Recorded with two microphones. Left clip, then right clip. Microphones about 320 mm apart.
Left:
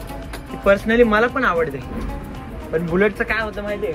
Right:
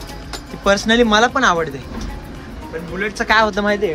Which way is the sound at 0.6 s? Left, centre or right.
Centre.